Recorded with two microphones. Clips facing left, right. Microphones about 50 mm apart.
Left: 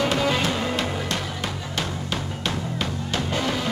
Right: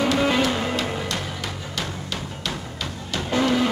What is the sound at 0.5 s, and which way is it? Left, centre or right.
Music, centre.